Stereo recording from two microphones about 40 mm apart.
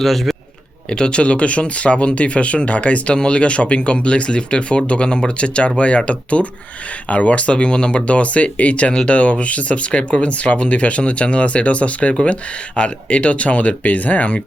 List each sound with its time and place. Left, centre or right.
0.0 s speech: centre
0.9 s speech: left